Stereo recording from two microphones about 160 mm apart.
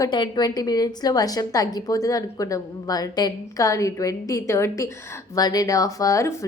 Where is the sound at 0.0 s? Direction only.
25° left (ahead or behind).